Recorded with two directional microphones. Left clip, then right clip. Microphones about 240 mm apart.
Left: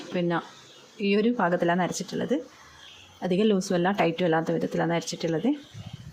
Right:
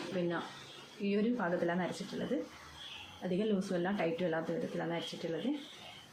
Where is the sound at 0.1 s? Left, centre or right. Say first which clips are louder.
Left 10 dB; left.